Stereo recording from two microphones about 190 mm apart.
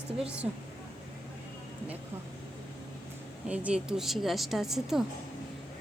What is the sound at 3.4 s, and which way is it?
Speech, 5° right (ahead or behind).